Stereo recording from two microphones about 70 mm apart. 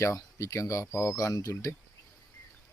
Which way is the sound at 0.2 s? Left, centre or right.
Left.